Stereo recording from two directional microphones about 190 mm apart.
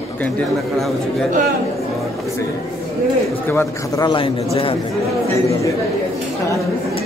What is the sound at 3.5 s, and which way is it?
A man's voice, 15° left (ahead or behind).